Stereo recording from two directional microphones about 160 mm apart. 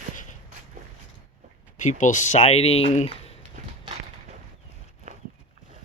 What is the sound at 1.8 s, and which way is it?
Speech, 50° left (ahead or behind).